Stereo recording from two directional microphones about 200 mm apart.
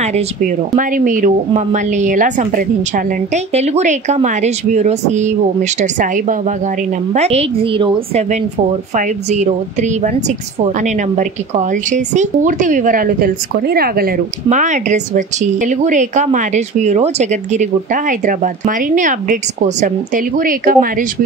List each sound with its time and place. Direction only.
0.0 s a woman's voice: 35° right (ahead or behind)